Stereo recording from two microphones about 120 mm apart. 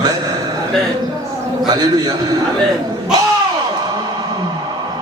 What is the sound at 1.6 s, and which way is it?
Speech, 35° right (ahead or behind).